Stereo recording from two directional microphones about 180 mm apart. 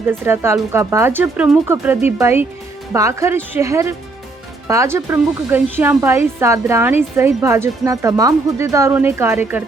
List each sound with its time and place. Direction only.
0.1 s speech: 15° right (ahead or behind)